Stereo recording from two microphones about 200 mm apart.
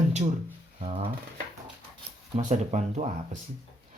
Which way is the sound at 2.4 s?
35° right (ahead or behind).